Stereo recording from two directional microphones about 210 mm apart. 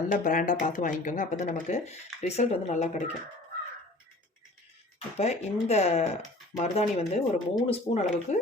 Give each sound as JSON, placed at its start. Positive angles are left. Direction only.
{"t": 0.1, "sound": "speech", "side_deg": 40}
{"t": 4.9, "sound": "speech", "side_deg": 30}